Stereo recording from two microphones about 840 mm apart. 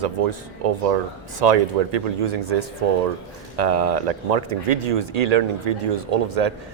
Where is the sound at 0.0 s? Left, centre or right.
Right.